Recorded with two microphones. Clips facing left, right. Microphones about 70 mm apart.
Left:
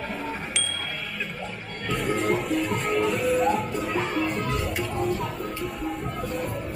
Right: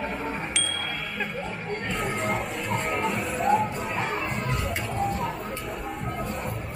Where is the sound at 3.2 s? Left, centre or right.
Centre.